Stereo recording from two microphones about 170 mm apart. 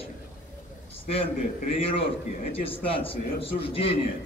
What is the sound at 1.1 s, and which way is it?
A man's voice, 35° left (ahead or behind).